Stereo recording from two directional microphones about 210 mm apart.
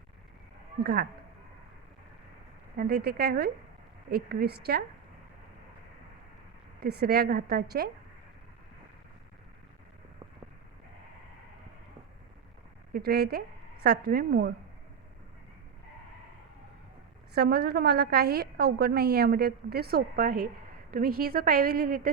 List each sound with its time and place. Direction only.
0.8 s a woman's voice: 50° right (ahead or behind)
2.7 s a woman's voice: 50° right (ahead or behind)
6.7 s a woman's voice: 45° right (ahead or behind)
12.9 s a woman's voice: 50° right (ahead or behind)
17.3 s a woman's voice: 50° right (ahead or behind)